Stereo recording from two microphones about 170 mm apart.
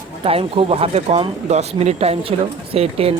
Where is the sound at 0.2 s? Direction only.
35° right (ahead or behind).